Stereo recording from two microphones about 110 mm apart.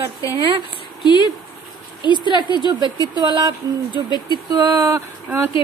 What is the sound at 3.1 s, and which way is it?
Speech, 45° right (ahead or behind).